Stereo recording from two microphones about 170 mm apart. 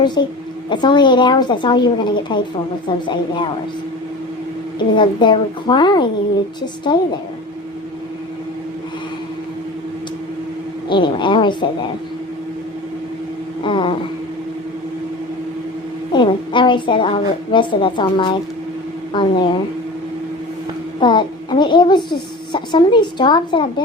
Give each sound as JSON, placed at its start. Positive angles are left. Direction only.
{"t": 0.0, "sound": "a child's voice", "side_deg": 25}
{"t": 4.9, "sound": "a child's voice", "side_deg": 30}
{"t": 10.8, "sound": "a child's voice", "side_deg": 30}
{"t": 13.7, "sound": "a child's voice", "side_deg": 30}
{"t": 16.1, "sound": "a child's voice", "side_deg": 30}
{"t": 21.0, "sound": "a child's voice", "side_deg": 25}